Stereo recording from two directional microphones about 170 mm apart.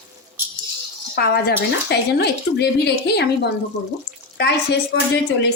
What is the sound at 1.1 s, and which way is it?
Speech, 65° left (ahead or behind).